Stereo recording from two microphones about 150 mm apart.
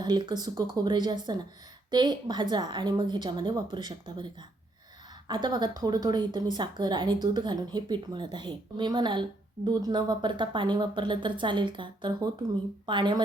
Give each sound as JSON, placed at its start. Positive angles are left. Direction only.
{"t": 0.0, "sound": "speech", "side_deg": -30}